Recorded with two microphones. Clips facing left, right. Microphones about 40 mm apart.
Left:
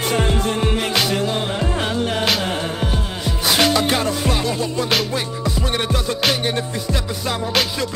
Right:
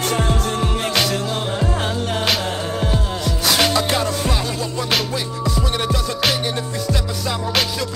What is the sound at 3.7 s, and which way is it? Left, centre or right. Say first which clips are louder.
Music: left 1 dB; left.